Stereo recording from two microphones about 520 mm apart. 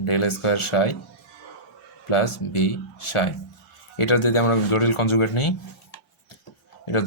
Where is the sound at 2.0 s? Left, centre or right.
Left.